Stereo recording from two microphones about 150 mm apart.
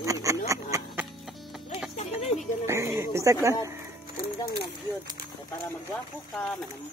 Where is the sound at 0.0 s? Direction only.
20° right (ahead or behind).